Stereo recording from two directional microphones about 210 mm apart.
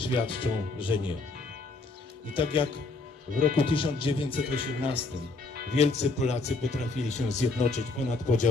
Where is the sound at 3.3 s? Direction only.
40° right (ahead or behind).